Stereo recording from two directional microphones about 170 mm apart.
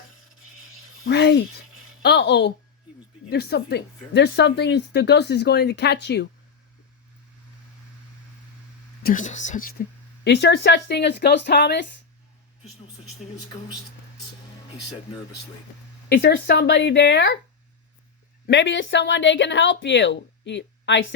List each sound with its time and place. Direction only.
1.0 s a woman's voice: 85° left
3.2 s a woman's voice: 75° left (ahead or behind)
9.0 s a woman's voice: 45° left (ahead or behind)
10.2 s a woman's voice: 80° left
16.0 s a woman's voice: 70° left (ahead or behind); by 17.3 s 90° left
18.4 s a woman's voice: 85° left